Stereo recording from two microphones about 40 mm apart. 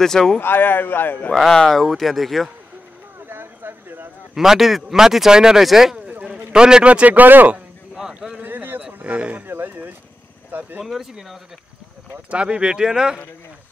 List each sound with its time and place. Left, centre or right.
0.0 s speech: centre
0.4 s speech: left
1.5 s speech: centre
3.2 s a sound: right
4.4 s speech: centre
6.5 s speech: right
6.9 s speech: right
8.1 s a sound: centre
8.4 s a sound: right
8.8 s a sound: right
10.9 s speech: centre
12.3 s speech: right